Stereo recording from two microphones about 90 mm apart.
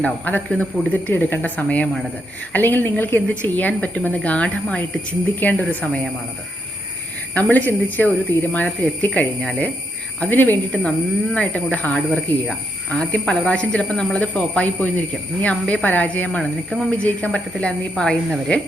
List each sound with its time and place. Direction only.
0.0 s speech: 15° left (ahead or behind)
7.3 s speech: 20° left (ahead or behind)